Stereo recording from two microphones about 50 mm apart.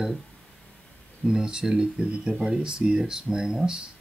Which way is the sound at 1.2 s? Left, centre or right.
Centre.